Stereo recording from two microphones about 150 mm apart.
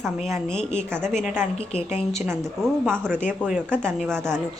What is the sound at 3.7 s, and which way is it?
Speech, 5° left (ahead or behind).